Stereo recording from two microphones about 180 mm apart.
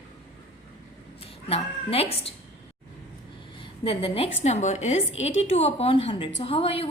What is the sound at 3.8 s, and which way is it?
A woman's voice, 30° left (ahead or behind).